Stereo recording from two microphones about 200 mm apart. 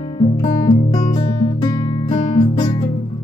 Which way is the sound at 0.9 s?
20° left (ahead or behind).